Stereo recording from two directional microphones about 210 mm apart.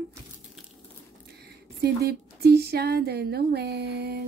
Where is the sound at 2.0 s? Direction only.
50° right (ahead or behind).